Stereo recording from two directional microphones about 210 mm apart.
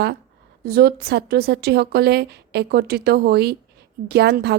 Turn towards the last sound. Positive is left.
turn(degrees=-50)  # may be behind; listen again after turning